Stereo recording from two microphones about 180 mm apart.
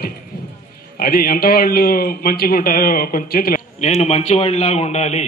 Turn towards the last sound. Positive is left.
turn(degrees=40)  # may be behind; listen again after turning